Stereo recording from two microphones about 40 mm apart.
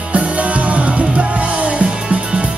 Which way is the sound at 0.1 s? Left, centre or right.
Right.